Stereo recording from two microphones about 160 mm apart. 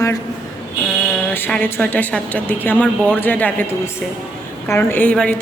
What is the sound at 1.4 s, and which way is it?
A woman's voice, 10° left (ahead or behind).